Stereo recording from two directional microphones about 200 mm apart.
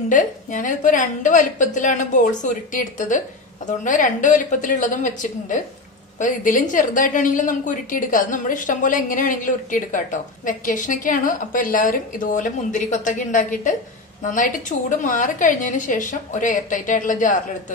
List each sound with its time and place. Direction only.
0.1 s a woman's voice: 40° left (ahead or behind)